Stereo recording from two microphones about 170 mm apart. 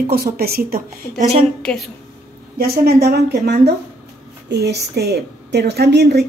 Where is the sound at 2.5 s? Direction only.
65° right (ahead or behind).